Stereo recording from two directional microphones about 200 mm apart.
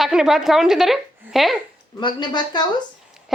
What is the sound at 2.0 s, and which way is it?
Speech, 20° left (ahead or behind).